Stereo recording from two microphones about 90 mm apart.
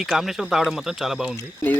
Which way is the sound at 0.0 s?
Centre (ahead or behind).